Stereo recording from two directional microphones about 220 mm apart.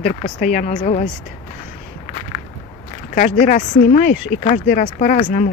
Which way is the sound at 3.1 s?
35° left (ahead or behind).